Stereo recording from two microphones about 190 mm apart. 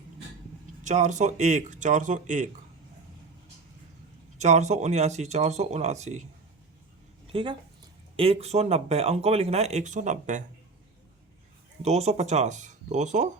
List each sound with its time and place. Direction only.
0.9 s speech: 40° right (ahead or behind)
4.4 s speech: 35° right (ahead or behind)
7.3 s speech: 30° right (ahead or behind)
11.8 s speech: 35° right (ahead or behind)